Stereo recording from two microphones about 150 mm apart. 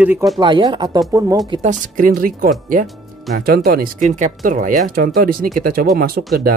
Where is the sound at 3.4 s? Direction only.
90° right.